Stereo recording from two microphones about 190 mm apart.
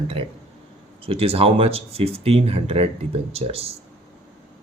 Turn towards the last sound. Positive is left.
turn(degrees=-30)  # may be behind; listen again after turning